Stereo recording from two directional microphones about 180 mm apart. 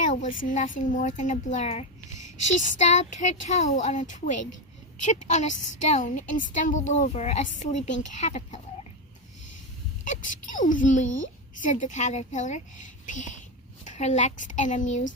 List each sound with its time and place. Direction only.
0.0 s a woman's voice: 45° left (ahead or behind)
10.0 s a woman's voice: 45° left (ahead or behind)